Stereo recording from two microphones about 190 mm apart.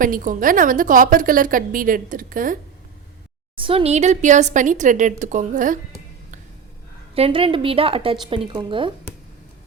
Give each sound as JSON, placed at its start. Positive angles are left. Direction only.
{"t": 0.0, "sound": "a woman's voice", "side_deg": -45}
{"t": 3.5, "sound": "a woman's voice", "side_deg": -30}
{"t": 7.2, "sound": "a woman's voice", "side_deg": -30}